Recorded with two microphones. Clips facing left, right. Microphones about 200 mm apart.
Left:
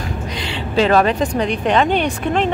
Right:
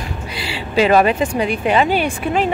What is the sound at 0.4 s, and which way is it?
Speech, 10° right (ahead or behind).